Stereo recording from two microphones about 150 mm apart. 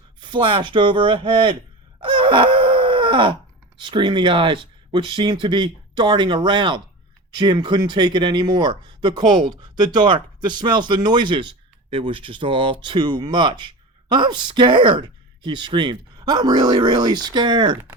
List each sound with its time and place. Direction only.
0.2 s speech: 30° right (ahead or behind)
2.0 s a sound: 35° right (ahead or behind)
3.8 s speech: 30° right (ahead or behind)